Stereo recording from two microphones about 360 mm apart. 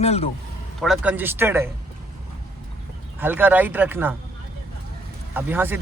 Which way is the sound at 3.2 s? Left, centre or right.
Centre.